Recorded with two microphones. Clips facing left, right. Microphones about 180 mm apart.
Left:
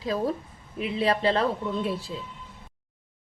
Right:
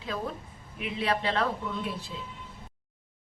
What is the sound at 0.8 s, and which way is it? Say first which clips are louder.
Speech: left 5 dB; 35° left (ahead or behind).